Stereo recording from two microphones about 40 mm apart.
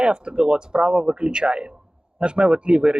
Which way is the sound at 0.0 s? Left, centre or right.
Right.